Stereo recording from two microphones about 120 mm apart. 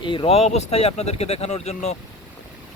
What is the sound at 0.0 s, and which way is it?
Speech, 45° left (ahead or behind).